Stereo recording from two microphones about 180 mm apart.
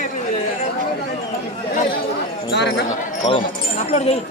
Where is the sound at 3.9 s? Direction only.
35° left (ahead or behind).